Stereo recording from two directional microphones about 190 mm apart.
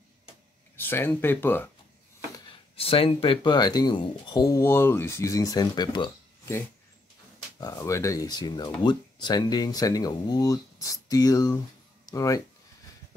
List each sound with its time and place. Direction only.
0.7 s speech: 10° left (ahead or behind)
2.7 s speech: 30° left (ahead or behind)
7.6 s speech: 15° left (ahead or behind)